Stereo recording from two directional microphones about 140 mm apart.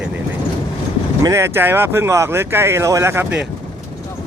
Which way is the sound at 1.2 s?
20° right (ahead or behind).